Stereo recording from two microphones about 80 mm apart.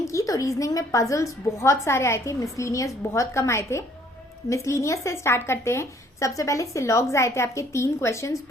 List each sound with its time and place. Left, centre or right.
0.0 s speech: left